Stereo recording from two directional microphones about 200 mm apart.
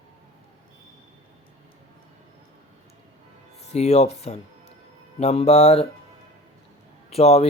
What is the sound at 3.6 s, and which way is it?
Speech, 30° left (ahead or behind).